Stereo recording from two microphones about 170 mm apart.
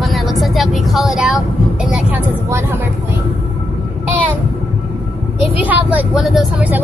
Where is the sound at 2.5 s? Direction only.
15° right (ahead or behind).